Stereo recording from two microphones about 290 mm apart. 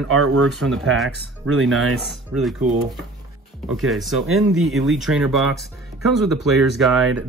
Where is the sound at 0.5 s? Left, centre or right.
Centre.